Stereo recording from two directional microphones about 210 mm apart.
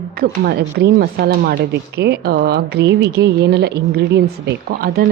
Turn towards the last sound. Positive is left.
turn(degrees=-45)  # may be behind; listen again after turning